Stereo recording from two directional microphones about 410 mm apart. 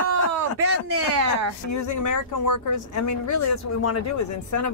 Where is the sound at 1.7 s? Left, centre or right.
Left.